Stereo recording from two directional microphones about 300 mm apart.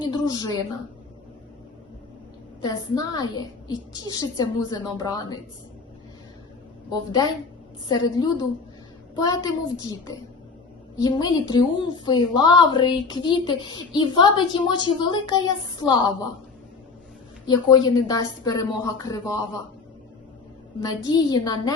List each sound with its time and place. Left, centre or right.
0.1 s a woman's voice: centre
2.6 s a woman's voice: centre
6.9 s a woman's voice: centre
10.9 s a woman's voice: centre
17.4 s a woman's voice: centre
20.8 s a woman's voice: centre